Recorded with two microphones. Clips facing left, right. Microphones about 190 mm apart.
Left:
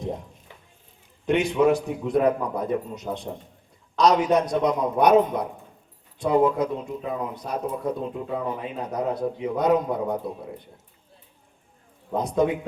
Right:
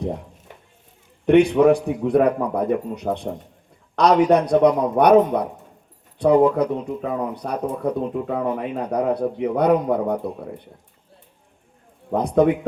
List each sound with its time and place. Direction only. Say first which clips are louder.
1.2 s speech: right 6 dB; 60° right (ahead or behind)
6.4 s speech: right 4 dB; 60° right (ahead or behind)
12.1 s speech: right 5 dB; 60° right (ahead or behind)